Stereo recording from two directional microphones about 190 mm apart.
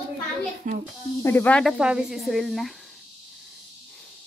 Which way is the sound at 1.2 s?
10° left (ahead or behind).